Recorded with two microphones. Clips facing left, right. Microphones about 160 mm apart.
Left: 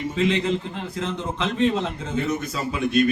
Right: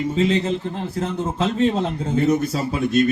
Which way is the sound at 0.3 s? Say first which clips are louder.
Right 2 dB; 35° right (ahead or behind).